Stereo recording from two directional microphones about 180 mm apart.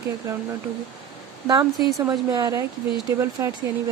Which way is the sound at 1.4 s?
20° right (ahead or behind).